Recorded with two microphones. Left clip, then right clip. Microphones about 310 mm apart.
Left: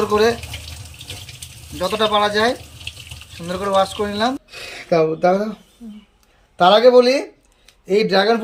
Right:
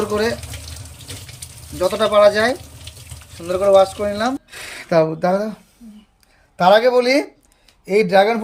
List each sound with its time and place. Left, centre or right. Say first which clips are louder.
0.1 s speech: left 4 dB; centre
1.8 s speech: right 4 dB; centre
6.7 s speech: left 3 dB; right
7.9 s speech: right 2 dB; right